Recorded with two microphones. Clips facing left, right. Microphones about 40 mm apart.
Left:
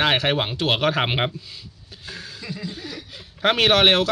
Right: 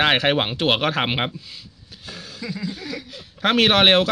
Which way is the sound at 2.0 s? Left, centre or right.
Centre.